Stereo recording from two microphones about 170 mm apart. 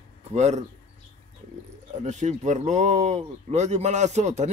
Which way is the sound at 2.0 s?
45° right (ahead or behind).